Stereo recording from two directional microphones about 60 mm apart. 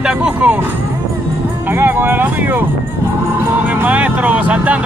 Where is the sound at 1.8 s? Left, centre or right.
Right.